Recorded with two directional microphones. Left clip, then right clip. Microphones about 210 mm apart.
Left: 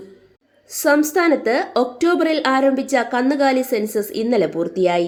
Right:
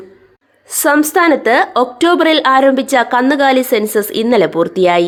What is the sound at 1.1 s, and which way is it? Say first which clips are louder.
A woman's voice: right 7 dB; 15° right (ahead or behind).